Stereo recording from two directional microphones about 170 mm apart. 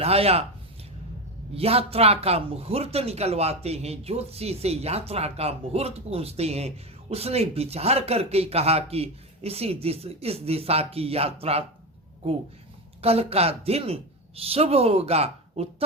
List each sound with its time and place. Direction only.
0.0 s speech: 35° right (ahead or behind)
1.5 s speech: 35° right (ahead or behind)
13.0 s a woman's voice: 35° right (ahead or behind)